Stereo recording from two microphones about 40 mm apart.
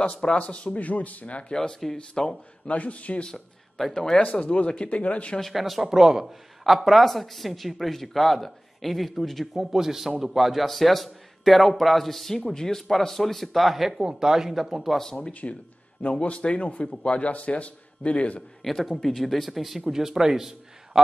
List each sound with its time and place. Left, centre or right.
0.0 s speech: left
0.7 s a man's voice: left
1.5 s speech: centre
2.7 s a man's voice: left
3.9 s speech: centre
4.2 s a man's voice: left
5.5 s speech: centre
15.4 s speech: left
16.0 s a man's voice: left
16.9 s speech: left
17.2 s a man's voice: left
18.6 s a man's voice: centre